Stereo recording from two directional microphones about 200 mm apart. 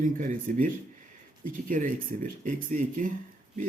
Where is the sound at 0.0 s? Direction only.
40° right (ahead or behind).